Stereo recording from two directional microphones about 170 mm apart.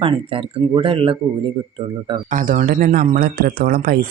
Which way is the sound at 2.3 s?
50° right (ahead or behind).